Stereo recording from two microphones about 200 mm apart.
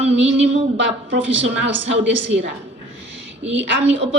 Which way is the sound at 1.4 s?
65° right (ahead or behind).